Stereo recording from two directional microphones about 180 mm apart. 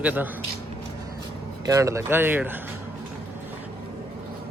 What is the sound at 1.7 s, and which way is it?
Speech, 15° right (ahead or behind).